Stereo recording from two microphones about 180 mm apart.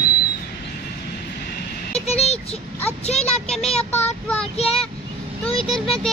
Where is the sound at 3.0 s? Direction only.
35° left (ahead or behind).